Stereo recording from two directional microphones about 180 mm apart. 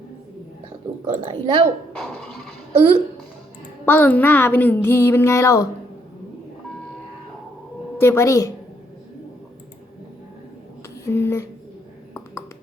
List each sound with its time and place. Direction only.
1.2 s speech: 30° right (ahead or behind)
2.7 s speech: 35° right (ahead or behind)
3.8 s speech: 10° left (ahead or behind)
7.9 s speech: 15° left (ahead or behind)
11.0 s speech: 15° left (ahead or behind)